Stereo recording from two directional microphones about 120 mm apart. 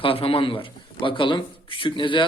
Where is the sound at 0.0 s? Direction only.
50° left (ahead or behind).